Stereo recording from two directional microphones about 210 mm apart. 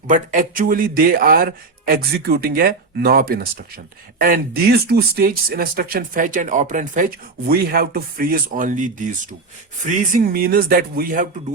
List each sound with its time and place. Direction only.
0.1 s speech: 40° right (ahead or behind)